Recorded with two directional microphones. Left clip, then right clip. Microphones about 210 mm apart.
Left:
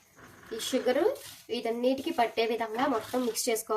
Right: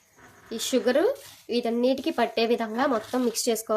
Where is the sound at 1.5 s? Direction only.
50° right (ahead or behind).